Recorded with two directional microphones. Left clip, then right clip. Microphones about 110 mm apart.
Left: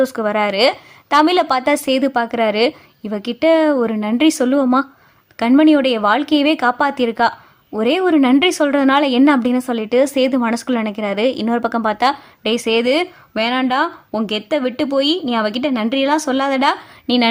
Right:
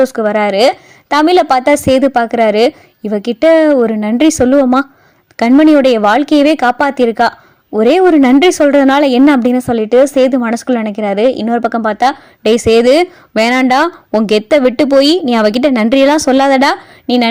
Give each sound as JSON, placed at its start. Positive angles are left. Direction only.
{"t": 0.0, "sound": "a woman's voice", "side_deg": -30}
{"t": 12.4, "sound": "speech", "side_deg": -45}
{"t": 17.1, "sound": "a woman's voice", "side_deg": -30}